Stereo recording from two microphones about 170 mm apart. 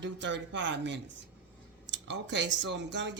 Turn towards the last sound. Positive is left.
turn(degrees=-90)